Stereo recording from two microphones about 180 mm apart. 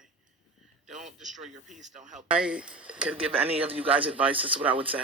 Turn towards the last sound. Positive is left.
turn(degrees=-30)  # may be behind; listen again after turning